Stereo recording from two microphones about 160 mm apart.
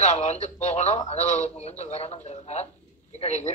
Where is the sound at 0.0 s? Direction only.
45° left (ahead or behind).